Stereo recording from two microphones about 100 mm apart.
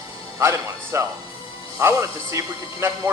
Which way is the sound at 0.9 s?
25° right (ahead or behind).